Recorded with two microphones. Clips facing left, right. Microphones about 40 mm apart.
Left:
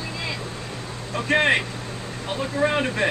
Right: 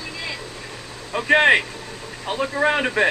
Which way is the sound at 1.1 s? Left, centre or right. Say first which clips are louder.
Right 4 dB; centre.